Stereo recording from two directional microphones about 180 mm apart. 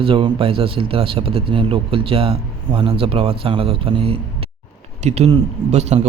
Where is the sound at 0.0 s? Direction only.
30° right (ahead or behind).